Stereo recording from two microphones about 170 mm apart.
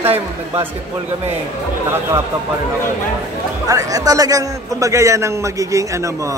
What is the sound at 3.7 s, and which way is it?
A man's voice, 20° right (ahead or behind).